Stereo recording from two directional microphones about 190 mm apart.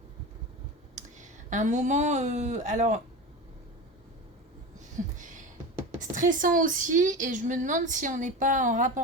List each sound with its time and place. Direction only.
0.9 s speech: 40° right (ahead or behind)
5.1 s a sound: 40° right (ahead or behind)
6.0 s a woman's voice: 40° right (ahead or behind)